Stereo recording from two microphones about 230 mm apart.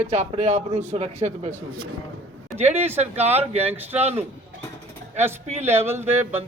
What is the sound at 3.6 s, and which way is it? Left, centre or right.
Speech, centre.